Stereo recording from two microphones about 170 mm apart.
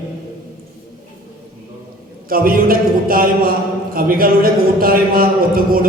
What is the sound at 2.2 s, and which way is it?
A man's voice, 60° right (ahead or behind).